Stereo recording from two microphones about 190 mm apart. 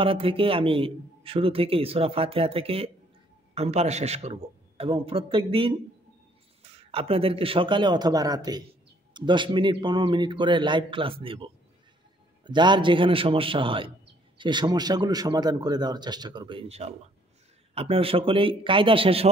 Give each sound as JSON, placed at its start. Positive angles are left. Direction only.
{"t": 0.0, "sound": "a man's voice", "side_deg": -30}